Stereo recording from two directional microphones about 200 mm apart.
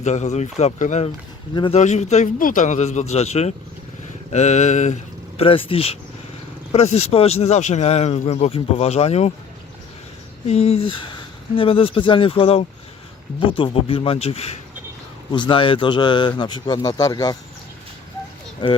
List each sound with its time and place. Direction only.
0.0 s speech: 35° left (ahead or behind)
1.5 s a man's voice: 25° left (ahead or behind)
1.8 s a man's voice: 35° left (ahead or behind)
10.4 s a man's voice: 30° left (ahead or behind)
18.6 s a man's voice: 20° left (ahead or behind)